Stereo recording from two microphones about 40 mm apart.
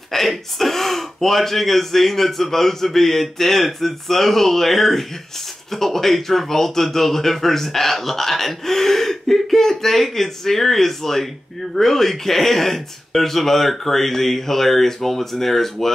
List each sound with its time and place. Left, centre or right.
0.1 s speech: centre